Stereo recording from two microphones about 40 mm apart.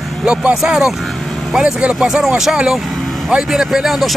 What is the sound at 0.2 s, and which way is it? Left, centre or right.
Speech, centre.